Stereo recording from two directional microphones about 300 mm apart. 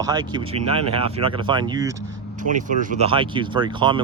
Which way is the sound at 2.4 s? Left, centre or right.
Right.